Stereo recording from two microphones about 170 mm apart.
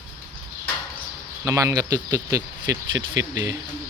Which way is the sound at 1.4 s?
20° right (ahead or behind).